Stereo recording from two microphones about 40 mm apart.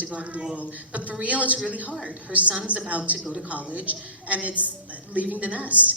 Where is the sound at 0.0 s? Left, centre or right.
Right.